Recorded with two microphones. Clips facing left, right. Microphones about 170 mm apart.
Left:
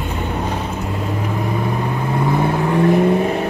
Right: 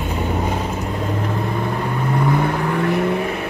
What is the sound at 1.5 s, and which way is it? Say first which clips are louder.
Vehicle: left 2 dB; 15° left (ahead or behind).